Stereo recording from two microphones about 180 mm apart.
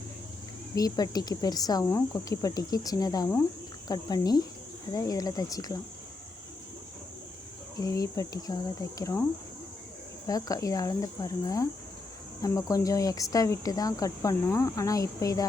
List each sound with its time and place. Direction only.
0.8 s speech: 20° left (ahead or behind)
7.8 s speech: 20° left (ahead or behind)
10.2 s speech: 20° left (ahead or behind)